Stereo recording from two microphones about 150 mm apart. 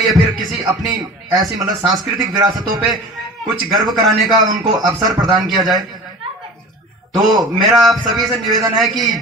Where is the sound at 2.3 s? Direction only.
30° right (ahead or behind).